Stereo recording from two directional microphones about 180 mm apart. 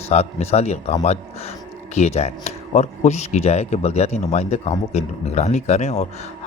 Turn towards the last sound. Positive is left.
turn(degrees=35)  # may be behind; listen again after turning